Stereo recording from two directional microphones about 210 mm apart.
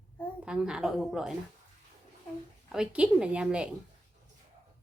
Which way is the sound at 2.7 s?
5° right (ahead or behind).